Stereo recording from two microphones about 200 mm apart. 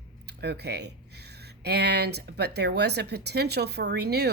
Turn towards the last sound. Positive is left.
turn(degrees=-55)  # may be behind; listen again after turning